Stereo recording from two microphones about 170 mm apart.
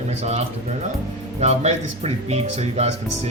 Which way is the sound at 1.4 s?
40° right (ahead or behind).